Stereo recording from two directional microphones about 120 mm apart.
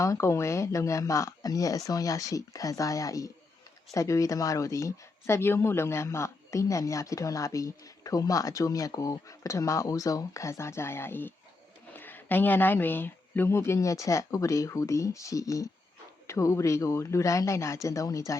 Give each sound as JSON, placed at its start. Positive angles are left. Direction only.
{"t": 0.0, "sound": "a woman's voice", "side_deg": 25}